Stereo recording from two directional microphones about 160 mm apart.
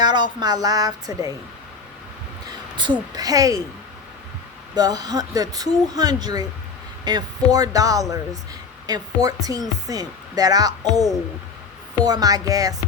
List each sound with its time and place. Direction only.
0.0 s speech: 25° right (ahead or behind)
3.1 s speech: 25° right (ahead or behind)
4.7 s speech: 25° right (ahead or behind)
12.0 s speech: 25° right (ahead or behind)